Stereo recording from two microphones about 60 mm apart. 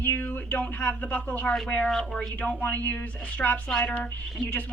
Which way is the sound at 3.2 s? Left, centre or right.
Left.